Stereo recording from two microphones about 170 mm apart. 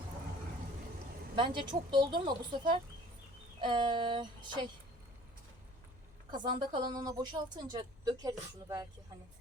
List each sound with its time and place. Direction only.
1.4 s speech: 25° right (ahead or behind)
6.3 s speech: 25° right (ahead or behind)